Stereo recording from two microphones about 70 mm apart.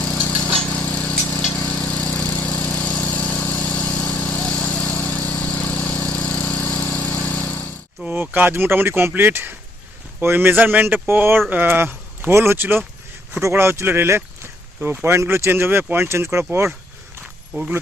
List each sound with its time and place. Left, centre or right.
0.0 s vehicle: centre
8.0 s speech: right
17.5 s speech: centre